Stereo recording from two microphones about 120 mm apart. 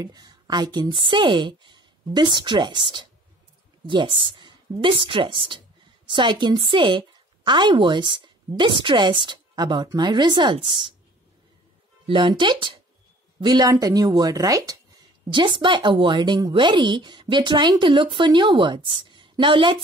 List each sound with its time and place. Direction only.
0.0 s speech: 35° right (ahead or behind)
12.1 s speech: 40° right (ahead or behind)